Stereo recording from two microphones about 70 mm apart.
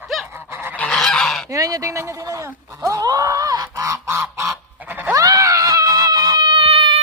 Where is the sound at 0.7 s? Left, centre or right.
Centre.